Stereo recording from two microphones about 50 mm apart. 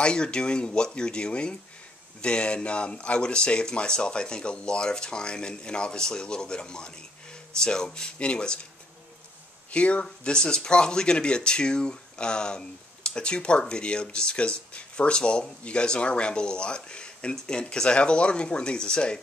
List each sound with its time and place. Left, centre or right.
0.0 s speech: centre
9.7 s speech: left
10.0 s speech: centre